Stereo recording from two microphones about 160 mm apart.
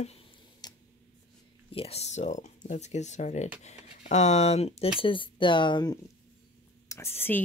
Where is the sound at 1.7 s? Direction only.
40° left (ahead or behind).